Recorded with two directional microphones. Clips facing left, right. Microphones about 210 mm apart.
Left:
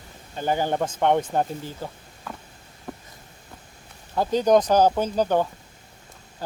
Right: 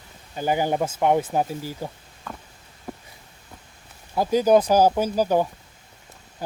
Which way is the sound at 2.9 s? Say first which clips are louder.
Right 1 dB; 5° right (ahead or behind).